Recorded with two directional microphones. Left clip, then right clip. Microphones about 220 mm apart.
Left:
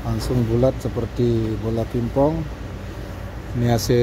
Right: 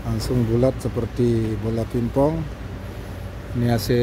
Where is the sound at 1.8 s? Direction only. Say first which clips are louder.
Left 1 dB; 5° right (ahead or behind).